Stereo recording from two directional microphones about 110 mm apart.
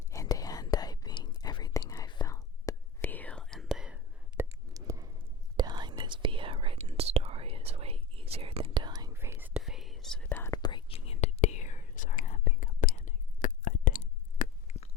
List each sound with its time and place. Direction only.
0.1 s whispering: 30° left (ahead or behind)
3.0 s whispering: 15° left (ahead or behind)
3.4 s whispering: centre (ahead or behind)
4.4 s a sound: 20° right (ahead or behind)
4.7 s a sound: 30° right (ahead or behind)
5.5 s whispering: 40° right (ahead or behind)
9.1 s whispering: 20° right (ahead or behind)
9.6 s whispering: 5° right (ahead or behind)
10.2 s whispering: 20° left (ahead or behind)
10.5 s whispering: 40° left (ahead or behind)
10.9 s whispering: 65° left (ahead or behind); by 12.4 s 90° left
14.7 s a sound: 90° left